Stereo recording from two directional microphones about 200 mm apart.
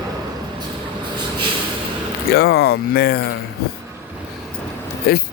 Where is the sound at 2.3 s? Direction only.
50° left (ahead or behind).